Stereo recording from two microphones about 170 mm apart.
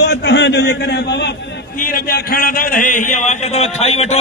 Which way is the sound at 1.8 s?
55° left (ahead or behind).